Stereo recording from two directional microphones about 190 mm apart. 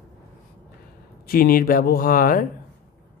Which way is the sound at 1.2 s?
50° left (ahead or behind).